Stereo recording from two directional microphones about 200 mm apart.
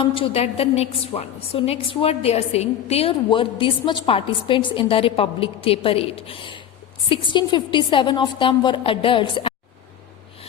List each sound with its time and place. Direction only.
0.0 s a woman's voice: 25° left (ahead or behind)